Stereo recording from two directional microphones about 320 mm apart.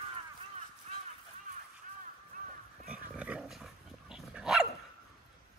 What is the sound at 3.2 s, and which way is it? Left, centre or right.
Dog, centre.